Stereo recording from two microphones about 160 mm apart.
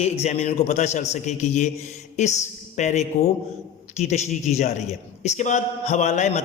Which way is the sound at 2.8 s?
45° left (ahead or behind).